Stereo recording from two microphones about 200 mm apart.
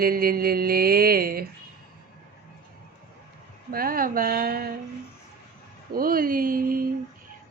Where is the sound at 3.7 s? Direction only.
45° right (ahead or behind).